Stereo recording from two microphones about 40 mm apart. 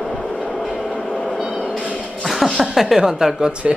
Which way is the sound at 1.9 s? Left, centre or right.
Left.